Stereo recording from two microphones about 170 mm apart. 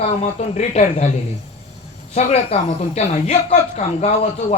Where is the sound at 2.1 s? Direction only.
40° left (ahead or behind).